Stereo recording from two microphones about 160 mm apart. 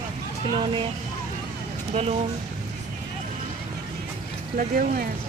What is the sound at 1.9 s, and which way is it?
Speech, 40° right (ahead or behind).